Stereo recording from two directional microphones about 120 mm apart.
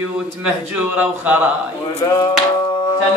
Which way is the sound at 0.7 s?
15° right (ahead or behind).